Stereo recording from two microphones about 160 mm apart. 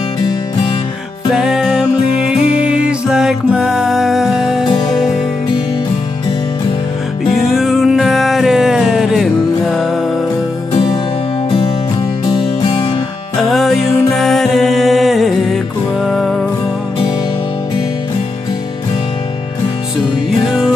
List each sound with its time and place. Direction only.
1.3 s music: 5° right (ahead or behind)
7.5 s music: centre (ahead or behind)
12.3 s music: 35° left (ahead or behind)
13.4 s music: centre (ahead or behind)
20.4 s music: 5° right (ahead or behind)